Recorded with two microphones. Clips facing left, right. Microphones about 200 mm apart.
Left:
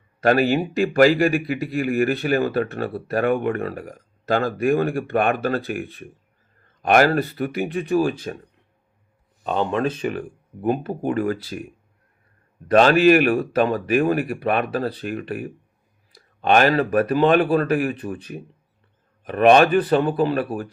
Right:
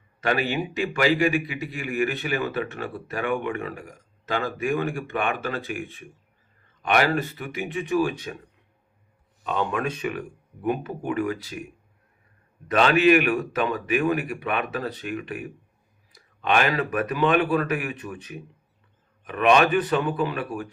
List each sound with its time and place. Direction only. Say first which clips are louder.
0.2 s a man's voice: left 7 dB; 40° left (ahead or behind)
6.9 s a man's voice: left 5 dB; 40° left (ahead or behind)
9.4 s a man's voice: left 4 dB; 30° left (ahead or behind)
12.6 s a man's voice: left 5 dB; 40° left (ahead or behind)